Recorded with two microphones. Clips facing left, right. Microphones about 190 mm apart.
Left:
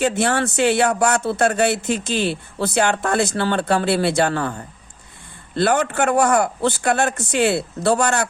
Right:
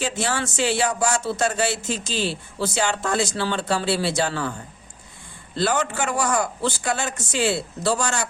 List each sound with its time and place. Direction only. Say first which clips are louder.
0.0 s speech: left 6 dB; 60° left (ahead or behind)
5.5 s speech: left 5 dB; 60° left (ahead or behind)